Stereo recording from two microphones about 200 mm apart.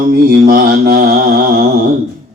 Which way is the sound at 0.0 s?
45° right (ahead or behind).